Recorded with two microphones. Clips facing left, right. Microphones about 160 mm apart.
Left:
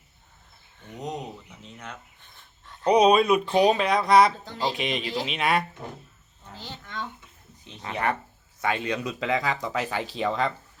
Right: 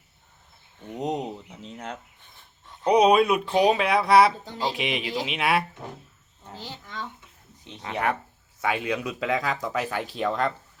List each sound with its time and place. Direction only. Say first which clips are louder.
0.9 s speech: right 5 dB; 25° right (ahead or behind)
2.6 s a woman's voice: even; 5° right (ahead or behind)
6.8 s speech: left 1 dB; centre (ahead or behind)